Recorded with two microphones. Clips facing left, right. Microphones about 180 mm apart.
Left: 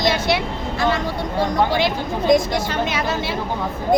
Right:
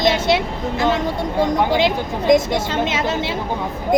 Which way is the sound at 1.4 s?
20° right (ahead or behind).